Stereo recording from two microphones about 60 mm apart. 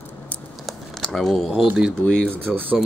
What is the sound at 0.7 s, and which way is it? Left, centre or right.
Typing, centre.